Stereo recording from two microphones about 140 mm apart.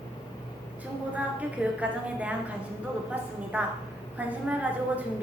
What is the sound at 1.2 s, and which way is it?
A woman's voice, 10° right (ahead or behind).